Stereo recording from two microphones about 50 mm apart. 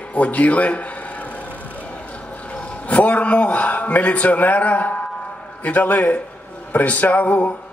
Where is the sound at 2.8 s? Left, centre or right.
Left.